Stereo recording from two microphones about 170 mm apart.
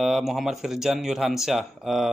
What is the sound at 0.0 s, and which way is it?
Speech, centre (ahead or behind).